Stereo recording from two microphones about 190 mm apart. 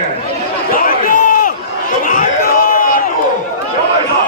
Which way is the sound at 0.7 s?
45° left (ahead or behind).